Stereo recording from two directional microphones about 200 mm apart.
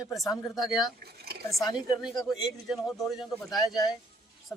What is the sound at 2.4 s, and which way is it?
A man's voice, centre (ahead or behind).